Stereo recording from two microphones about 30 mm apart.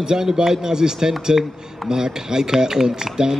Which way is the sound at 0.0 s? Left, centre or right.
Right.